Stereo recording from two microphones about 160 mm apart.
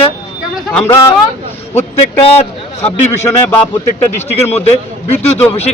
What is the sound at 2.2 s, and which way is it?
Speech, 40° left (ahead or behind).